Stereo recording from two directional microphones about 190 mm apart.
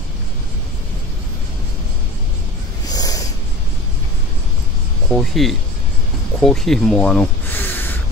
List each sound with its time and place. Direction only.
2.9 s snort: 20° left (ahead or behind)
5.1 s speech: centre (ahead or behind)